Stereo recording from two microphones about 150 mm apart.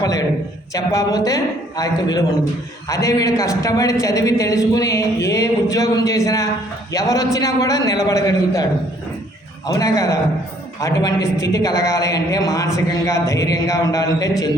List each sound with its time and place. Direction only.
0.0 s a man's voice: 25° left (ahead or behind)
9.6 s a man's voice: 20° left (ahead or behind)